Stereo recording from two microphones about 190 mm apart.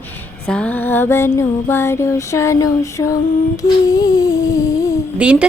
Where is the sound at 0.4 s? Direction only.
5° left (ahead or behind).